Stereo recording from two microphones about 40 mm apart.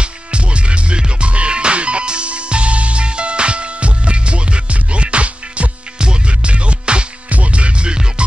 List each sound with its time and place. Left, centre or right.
0.0 s music: right